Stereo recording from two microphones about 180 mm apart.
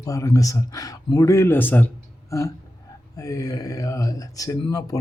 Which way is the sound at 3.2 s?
20° left (ahead or behind).